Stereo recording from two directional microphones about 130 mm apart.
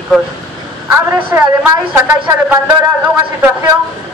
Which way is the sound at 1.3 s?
20° right (ahead or behind).